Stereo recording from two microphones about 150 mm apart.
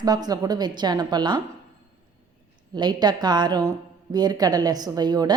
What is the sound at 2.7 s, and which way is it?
A woman's voice, 30° right (ahead or behind).